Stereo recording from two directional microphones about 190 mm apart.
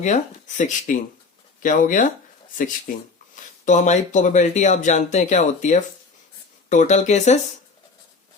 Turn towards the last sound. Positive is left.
turn(degrees=35)  # may be behind; listen again after turning